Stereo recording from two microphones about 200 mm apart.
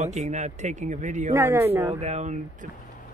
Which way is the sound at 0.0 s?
35° right (ahead or behind).